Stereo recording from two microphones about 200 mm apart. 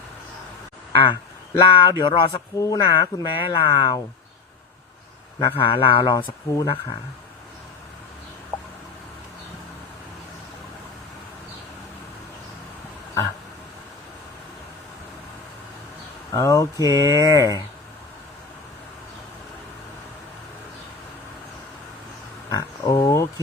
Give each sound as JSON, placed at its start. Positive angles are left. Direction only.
{"t": 1.5, "sound": "speech", "side_deg": 25}
{"t": 5.4, "sound": "speech", "side_deg": 25}
{"t": 16.3, "sound": "speech", "side_deg": 15}
{"t": 16.7, "sound": "speech", "side_deg": -15}
{"t": 17.2, "sound": "speech", "side_deg": 20}
{"t": 22.4, "sound": "oink", "side_deg": 20}